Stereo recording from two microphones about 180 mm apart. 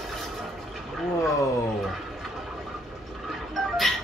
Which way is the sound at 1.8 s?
Centre (ahead or behind).